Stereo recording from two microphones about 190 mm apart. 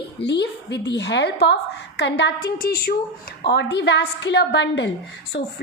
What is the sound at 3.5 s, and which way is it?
A woman's voice, 65° left (ahead or behind).